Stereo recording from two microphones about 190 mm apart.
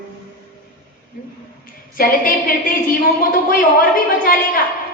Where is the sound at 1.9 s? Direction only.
50° left (ahead or behind).